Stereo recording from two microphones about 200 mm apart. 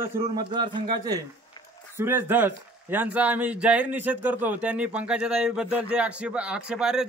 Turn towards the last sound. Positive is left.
turn(degrees=-5)  # may be behind; listen again after turning